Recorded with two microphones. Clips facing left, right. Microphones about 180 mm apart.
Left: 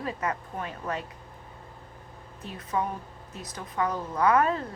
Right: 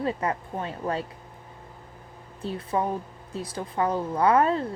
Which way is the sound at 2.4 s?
30° right (ahead or behind).